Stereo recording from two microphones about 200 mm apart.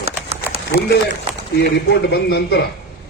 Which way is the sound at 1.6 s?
55° left (ahead or behind).